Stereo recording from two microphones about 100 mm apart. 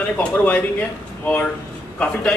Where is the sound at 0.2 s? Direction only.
15° left (ahead or behind).